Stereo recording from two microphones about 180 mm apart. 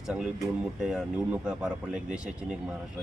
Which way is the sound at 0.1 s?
5° right (ahead or behind).